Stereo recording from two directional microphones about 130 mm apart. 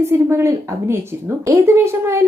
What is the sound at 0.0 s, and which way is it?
A woman's voice, 20° right (ahead or behind).